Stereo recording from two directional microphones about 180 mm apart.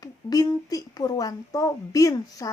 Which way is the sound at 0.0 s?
20° left (ahead or behind).